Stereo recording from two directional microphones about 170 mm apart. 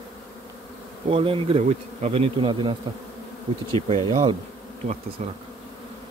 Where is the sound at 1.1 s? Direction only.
30° right (ahead or behind).